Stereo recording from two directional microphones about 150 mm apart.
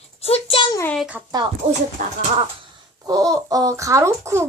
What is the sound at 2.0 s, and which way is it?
Speech, 60° right (ahead or behind).